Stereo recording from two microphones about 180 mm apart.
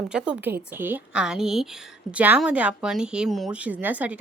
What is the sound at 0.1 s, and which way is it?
A woman's voice, 5° right (ahead or behind).